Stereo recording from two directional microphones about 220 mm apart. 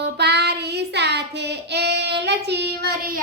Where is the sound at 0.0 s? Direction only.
50° right (ahead or behind).